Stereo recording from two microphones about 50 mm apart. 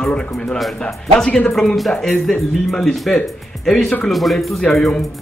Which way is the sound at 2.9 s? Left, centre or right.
Centre.